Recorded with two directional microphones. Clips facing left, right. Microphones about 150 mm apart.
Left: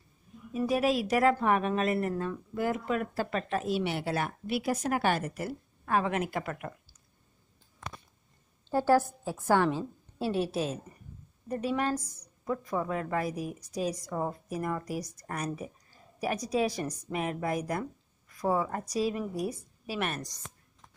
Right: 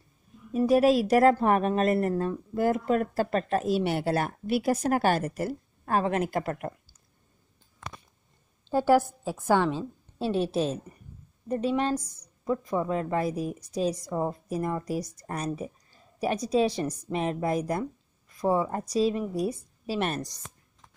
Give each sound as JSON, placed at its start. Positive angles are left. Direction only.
{"t": 0.5, "sound": "speech", "side_deg": -40}
{"t": 8.6, "sound": "a woman's voice", "side_deg": -15}